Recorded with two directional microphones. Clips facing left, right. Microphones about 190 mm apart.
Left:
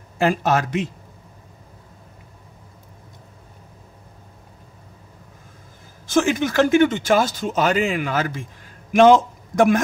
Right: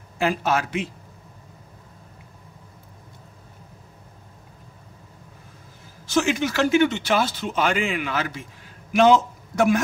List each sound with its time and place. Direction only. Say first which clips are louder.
0.2 s speech: left 3 dB; 40° left (ahead or behind)
6.0 s a man's voice: left 3 dB; 50° left (ahead or behind)